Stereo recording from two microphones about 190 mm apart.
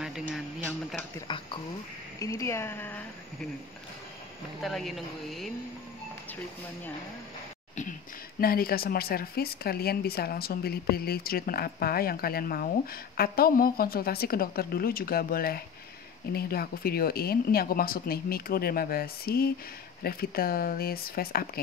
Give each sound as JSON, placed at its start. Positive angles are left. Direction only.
{"t": 1.1, "sound": "a woman's voice", "side_deg": 25}
{"t": 4.6, "sound": "speech", "side_deg": 0}
{"t": 8.4, "sound": "speech", "side_deg": 50}